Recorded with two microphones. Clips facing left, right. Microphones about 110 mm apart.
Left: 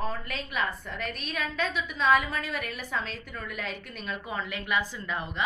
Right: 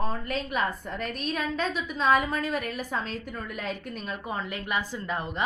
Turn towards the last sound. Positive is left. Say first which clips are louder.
# right 2 dB
turn(degrees=-40)  # may be behind; listen again after turning